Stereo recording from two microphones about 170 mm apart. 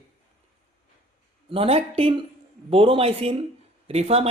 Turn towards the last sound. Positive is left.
turn(degrees=-35)  # may be behind; listen again after turning